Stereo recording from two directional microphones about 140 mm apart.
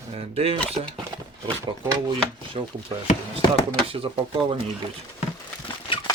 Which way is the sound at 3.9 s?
40° right (ahead or behind).